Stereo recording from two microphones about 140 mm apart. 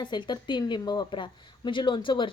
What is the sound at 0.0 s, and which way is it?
A woman's voice, 35° left (ahead or behind).